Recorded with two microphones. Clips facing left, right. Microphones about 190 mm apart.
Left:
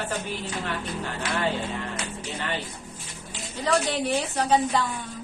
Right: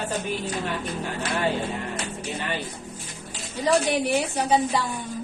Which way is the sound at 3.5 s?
15° right (ahead or behind).